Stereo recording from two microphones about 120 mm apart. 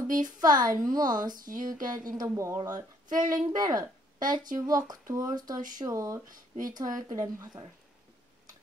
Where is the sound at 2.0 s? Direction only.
30° right (ahead or behind).